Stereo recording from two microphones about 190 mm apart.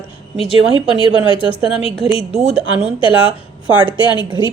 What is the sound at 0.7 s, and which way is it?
Speech, 25° left (ahead or behind).